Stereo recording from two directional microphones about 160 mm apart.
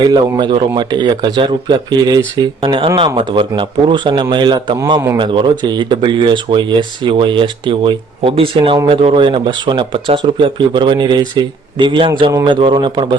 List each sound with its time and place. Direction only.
0.0 s speech: 25° right (ahead or behind)